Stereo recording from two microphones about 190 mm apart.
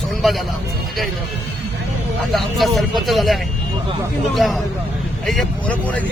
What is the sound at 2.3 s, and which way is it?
Speech, centre (ahead or behind).